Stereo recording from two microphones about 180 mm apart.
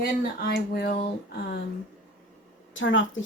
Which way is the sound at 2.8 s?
90° left.